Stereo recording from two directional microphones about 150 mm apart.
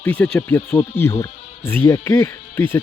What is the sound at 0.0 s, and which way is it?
Speech, 10° left (ahead or behind).